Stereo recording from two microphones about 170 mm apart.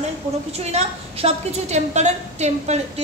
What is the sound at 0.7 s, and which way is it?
A woman's voice, 40° right (ahead or behind).